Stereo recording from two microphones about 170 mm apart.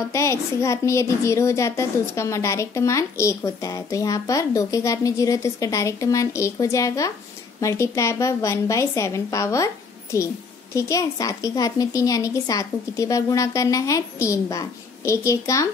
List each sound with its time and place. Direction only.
0.1 s a woman's voice: 15° left (ahead or behind)